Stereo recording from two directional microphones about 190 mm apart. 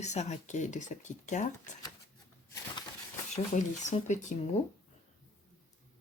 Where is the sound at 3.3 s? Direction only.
40° left (ahead or behind).